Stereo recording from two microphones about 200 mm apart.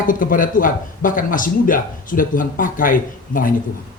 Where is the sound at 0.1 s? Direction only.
45° left (ahead or behind).